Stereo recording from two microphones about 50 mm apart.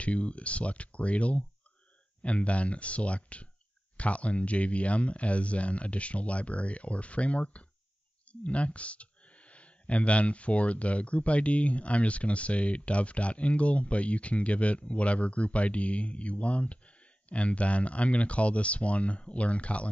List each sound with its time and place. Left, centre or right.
0.0 s speech: left